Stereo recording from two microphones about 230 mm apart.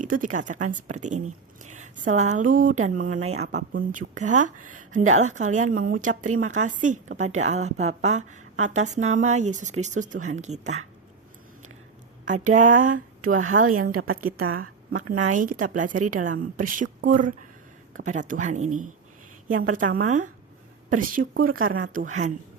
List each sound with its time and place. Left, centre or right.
0.0 s a woman's voice: right
12.3 s a woman's voice: right
13.3 s a woman's voice: right
15.3 s a woman's voice: right
19.5 s a woman's voice: right
19.7 s a woman's voice: right